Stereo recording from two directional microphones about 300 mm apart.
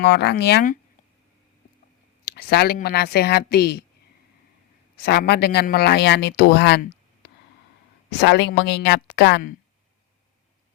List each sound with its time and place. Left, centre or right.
0.0 s speech: left
2.2 s speech: left
5.0 s speech: left